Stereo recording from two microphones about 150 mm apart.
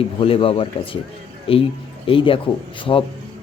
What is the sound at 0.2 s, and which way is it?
A man's voice, 35° left (ahead or behind).